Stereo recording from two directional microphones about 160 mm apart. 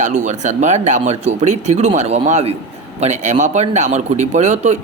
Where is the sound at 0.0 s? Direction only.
45° right (ahead or behind).